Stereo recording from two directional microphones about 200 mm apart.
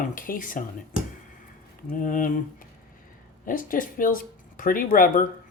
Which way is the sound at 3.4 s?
45° left (ahead or behind).